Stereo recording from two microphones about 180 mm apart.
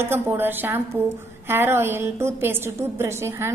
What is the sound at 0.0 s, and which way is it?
A woman's voice, 15° right (ahead or behind).